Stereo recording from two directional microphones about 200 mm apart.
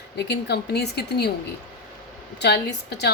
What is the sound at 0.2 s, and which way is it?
A woman's voice, 55° left (ahead or behind).